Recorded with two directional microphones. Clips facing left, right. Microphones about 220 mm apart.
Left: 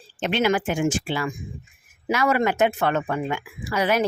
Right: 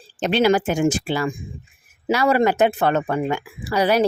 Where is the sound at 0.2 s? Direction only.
35° right (ahead or behind).